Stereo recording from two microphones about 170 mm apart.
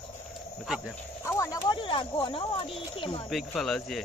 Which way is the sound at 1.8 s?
30° left (ahead or behind).